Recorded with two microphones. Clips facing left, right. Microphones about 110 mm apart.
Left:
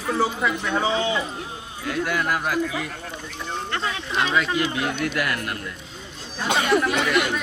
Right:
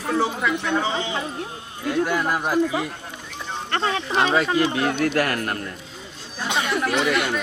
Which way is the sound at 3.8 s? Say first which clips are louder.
Right 6 dB; 35° right (ahead or behind).